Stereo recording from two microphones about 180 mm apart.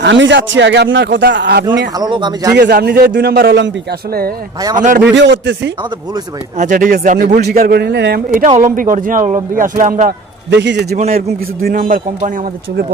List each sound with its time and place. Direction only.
0.0 s speech: 85° right
1.3 s speech: 75° right (ahead or behind)
2.0 s speech: 25° right (ahead or behind)
2.6 s a man's voice: 65° right (ahead or behind)
4.8 s a man's voice: 45° right (ahead or behind)
5.1 s speech: 80° right
6.6 s a man's voice: 50° right (ahead or behind)
7.3 s a man's voice: 60° right (ahead or behind)
8.7 s a man's voice: 50° right (ahead or behind); by 10.8 s 75° right (ahead or behind)
10.9 s a man's voice: 45° right (ahead or behind)